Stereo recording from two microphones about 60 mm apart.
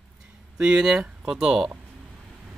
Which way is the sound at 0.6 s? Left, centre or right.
Centre.